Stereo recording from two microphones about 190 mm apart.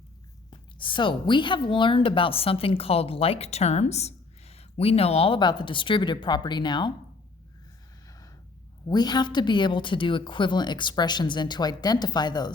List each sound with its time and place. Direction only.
0.5 s a woman's voice: 25° left (ahead or behind)
8.9 s a woman's voice: 20° left (ahead or behind)